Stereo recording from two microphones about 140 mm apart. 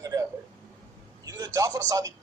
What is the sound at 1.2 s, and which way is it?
Speech, 25° right (ahead or behind).